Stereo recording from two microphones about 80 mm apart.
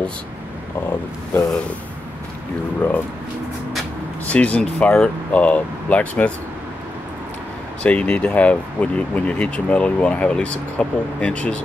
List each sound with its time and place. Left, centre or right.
2.8 s speech: centre
4.3 s speech: centre
7.8 s speech: centre